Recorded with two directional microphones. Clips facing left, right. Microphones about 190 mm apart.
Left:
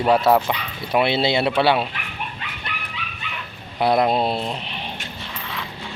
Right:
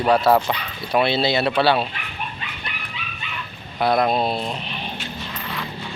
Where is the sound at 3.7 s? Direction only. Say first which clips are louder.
Left 1 dB; 10° left (ahead or behind).